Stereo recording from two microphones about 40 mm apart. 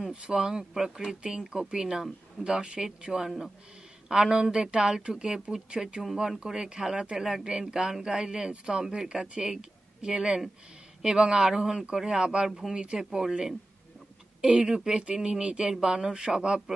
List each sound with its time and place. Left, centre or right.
0.1 s speech: right
1.0 s speech: right
3.3 s speech: centre
4.1 s speech: centre
5.8 s speech: centre
6.1 s speech: centre